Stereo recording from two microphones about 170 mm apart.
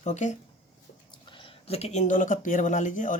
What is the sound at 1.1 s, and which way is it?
Speech, 30° left (ahead or behind).